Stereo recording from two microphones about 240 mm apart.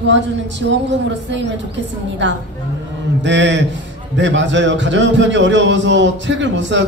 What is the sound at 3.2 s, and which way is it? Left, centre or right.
A man's voice, right.